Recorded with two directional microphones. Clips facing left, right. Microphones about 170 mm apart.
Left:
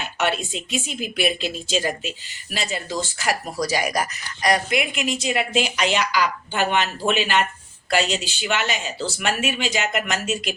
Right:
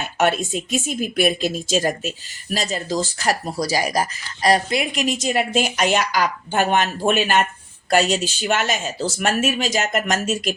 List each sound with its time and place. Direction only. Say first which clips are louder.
0.0 s a woman's voice: right 4 dB; 45° right (ahead or behind)